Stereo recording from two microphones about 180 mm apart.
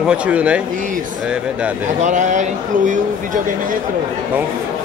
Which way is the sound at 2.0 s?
45° right (ahead or behind).